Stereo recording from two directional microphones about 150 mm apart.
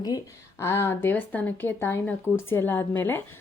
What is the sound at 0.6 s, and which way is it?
Speech, 15° left (ahead or behind).